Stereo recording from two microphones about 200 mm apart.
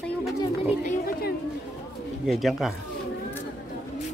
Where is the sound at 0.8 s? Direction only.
45° left (ahead or behind).